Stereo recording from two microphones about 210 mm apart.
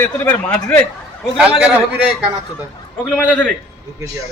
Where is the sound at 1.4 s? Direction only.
5° right (ahead or behind).